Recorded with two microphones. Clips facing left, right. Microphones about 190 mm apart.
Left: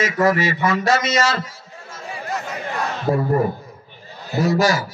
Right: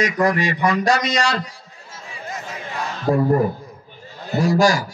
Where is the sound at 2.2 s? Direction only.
70° left (ahead or behind).